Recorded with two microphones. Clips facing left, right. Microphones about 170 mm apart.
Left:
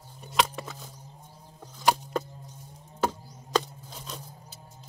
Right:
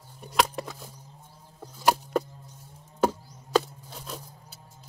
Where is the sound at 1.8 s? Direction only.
5° right (ahead or behind).